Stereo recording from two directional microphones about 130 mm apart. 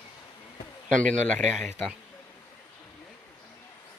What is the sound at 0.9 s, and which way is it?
Speech, 65° right (ahead or behind).